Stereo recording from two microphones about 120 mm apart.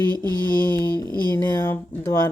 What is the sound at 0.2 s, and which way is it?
Mantra, 35° right (ahead or behind).